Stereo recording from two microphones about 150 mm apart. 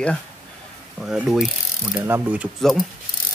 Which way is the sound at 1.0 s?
5° right (ahead or behind).